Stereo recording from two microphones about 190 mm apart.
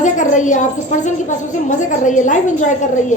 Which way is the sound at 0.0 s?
40° left (ahead or behind).